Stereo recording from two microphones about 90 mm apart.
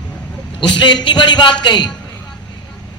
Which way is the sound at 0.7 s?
55° left (ahead or behind).